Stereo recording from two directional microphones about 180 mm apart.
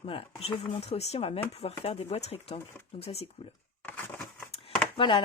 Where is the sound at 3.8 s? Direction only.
10° left (ahead or behind).